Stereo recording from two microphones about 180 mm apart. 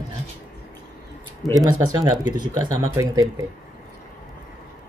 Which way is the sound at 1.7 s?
20° right (ahead or behind).